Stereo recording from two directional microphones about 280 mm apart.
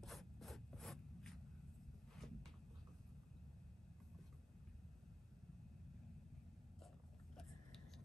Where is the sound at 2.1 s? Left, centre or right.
Centre.